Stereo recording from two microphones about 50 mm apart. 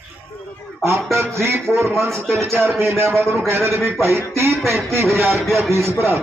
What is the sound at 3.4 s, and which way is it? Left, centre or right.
Music, right.